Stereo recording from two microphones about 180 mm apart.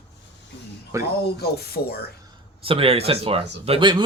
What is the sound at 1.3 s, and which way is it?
Music, 60° left (ahead or behind).